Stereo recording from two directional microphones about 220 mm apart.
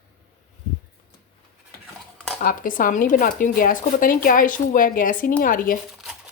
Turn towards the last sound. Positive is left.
turn(degrees=0)  # may be behind; listen again after turning